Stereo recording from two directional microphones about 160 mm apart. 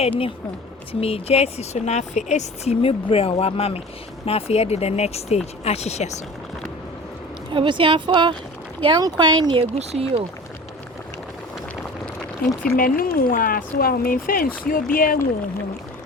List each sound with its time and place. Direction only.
1.0 s speech: 40° left (ahead or behind)
7.5 s speech: 30° right (ahead or behind)
12.4 s speech: 60° left (ahead or behind)